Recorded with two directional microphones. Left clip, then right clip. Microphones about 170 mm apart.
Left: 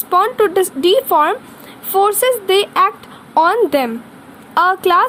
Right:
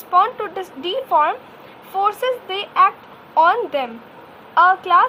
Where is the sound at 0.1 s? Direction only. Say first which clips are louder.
Left 4 dB; 50° left (ahead or behind).